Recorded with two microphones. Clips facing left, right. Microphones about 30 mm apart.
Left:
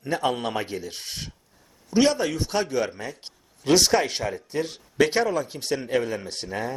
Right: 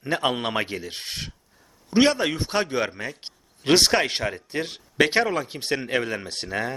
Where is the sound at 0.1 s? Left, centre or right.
Right.